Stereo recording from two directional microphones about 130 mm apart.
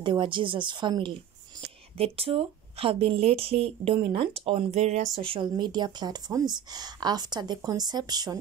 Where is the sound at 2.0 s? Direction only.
50° right (ahead or behind).